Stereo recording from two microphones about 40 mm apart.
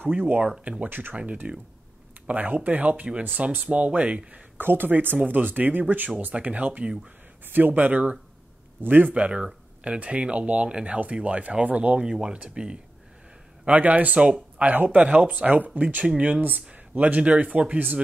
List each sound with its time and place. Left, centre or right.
0.0 s speech: right
0.8 s speech: right
1.1 s speech: right
4.6 s speech: right
5.1 s speech: right
7.4 s speech: right
10.9 s speech: right
12.0 s speech: right
13.7 s speech: right